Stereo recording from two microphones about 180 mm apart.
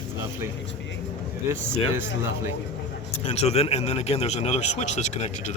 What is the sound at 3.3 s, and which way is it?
Speech, 35° left (ahead or behind).